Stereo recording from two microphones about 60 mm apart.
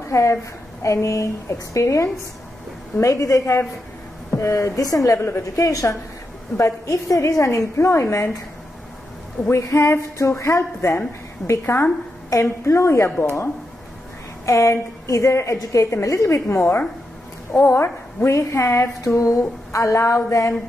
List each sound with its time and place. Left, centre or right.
0.1 s a woman's voice: left
6.5 s a woman's voice: left
9.5 s a woman's voice: left
14.4 s a woman's voice: left